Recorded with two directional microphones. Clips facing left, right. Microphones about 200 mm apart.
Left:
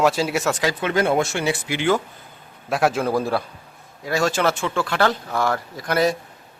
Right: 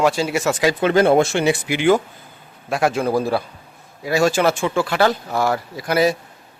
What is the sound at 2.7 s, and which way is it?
A man's voice, centre (ahead or behind).